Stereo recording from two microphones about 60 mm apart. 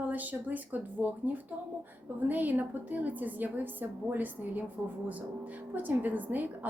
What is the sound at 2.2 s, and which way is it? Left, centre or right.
A woman's voice, right.